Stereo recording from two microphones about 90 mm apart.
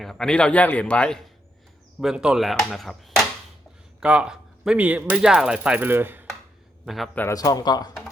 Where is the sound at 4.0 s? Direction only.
10° right (ahead or behind).